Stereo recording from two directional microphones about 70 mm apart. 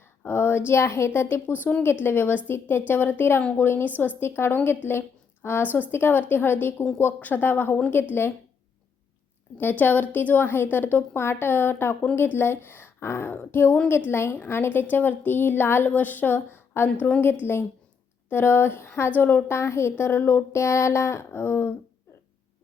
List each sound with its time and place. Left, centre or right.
0.3 s a sound: left
0.7 s a woman's voice: left
9.6 s a woman's voice: left